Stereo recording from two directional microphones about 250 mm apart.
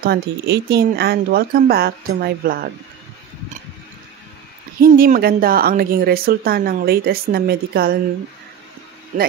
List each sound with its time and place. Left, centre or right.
0.0 s speech: right
4.7 s speech: right
9.1 s speech: right